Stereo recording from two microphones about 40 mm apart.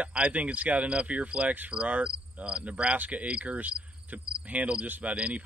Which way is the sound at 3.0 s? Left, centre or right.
Right.